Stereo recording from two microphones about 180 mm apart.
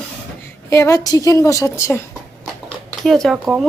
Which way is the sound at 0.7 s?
15° left (ahead or behind).